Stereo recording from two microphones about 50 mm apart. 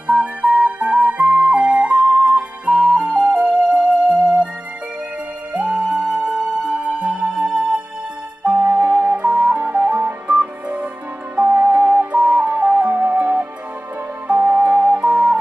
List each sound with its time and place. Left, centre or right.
0.0 s music: right
5.5 s music: right
11.5 s music: right
11.9 s music: right
12.7 s music: right